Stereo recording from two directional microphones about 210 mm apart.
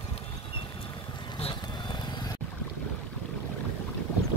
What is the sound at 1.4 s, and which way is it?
Vehicle, 25° left (ahead or behind).